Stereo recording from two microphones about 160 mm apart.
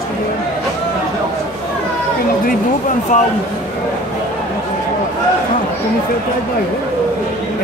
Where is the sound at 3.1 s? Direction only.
50° left (ahead or behind).